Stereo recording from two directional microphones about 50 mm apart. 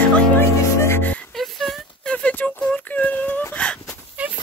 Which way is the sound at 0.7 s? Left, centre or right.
Left.